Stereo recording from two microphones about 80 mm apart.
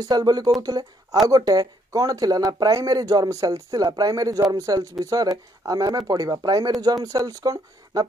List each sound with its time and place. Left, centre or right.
0.0 s speech: right